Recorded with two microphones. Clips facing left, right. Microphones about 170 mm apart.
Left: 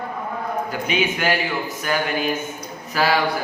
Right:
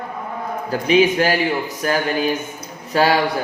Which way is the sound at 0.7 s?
35° right (ahead or behind).